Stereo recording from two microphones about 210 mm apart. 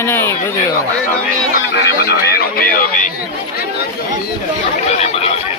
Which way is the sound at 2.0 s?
50° left (ahead or behind).